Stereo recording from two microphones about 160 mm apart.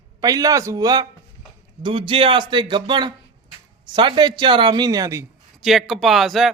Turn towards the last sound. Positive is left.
turn(degrees=0)  # may be behind; listen again after turning